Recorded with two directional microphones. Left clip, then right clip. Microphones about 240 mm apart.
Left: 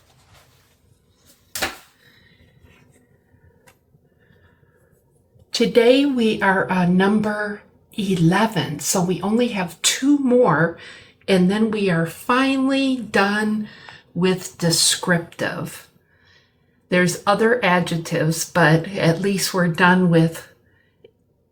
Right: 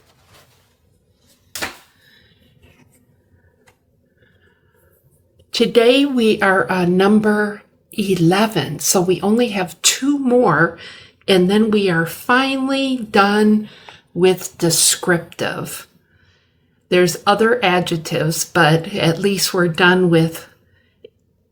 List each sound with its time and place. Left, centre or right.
5.5 s a woman's voice: right
16.9 s speech: right